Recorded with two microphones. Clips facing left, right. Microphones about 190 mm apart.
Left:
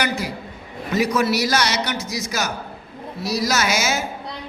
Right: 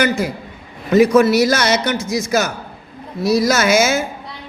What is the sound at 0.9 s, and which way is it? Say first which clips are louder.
A man's voice: right 9 dB; 50° right (ahead or behind).